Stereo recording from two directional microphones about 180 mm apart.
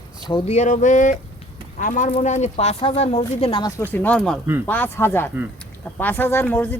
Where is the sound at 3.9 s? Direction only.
10° left (ahead or behind).